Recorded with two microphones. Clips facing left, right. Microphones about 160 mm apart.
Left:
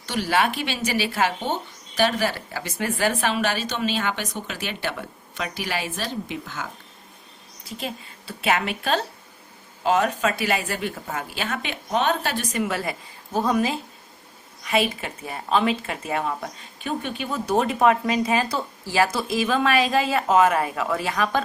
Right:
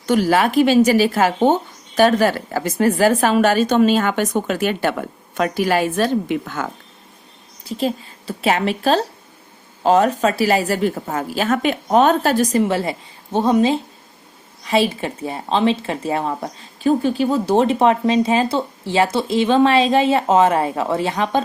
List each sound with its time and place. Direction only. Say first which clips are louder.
0.0 s a woman's voice: right 7 dB; 45° right (ahead or behind)
7.7 s a woman's voice: right 11 dB; 35° right (ahead or behind)